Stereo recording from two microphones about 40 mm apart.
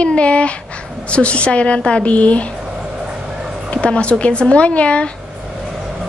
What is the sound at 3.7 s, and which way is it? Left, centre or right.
Speech, left.